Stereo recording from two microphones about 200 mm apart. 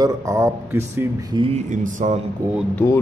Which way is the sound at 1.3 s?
30° right (ahead or behind).